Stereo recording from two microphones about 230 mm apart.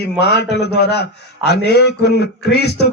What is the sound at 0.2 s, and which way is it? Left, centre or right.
A man's voice, left.